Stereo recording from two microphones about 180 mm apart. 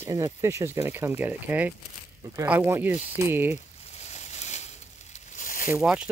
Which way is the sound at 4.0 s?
40° left (ahead or behind).